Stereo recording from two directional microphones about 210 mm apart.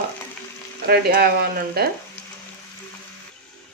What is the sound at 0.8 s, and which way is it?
Speech, 45° right (ahead or behind).